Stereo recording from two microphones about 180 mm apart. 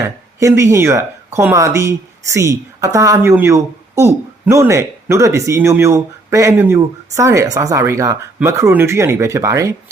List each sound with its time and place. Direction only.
0.3 s speech: 15° right (ahead or behind)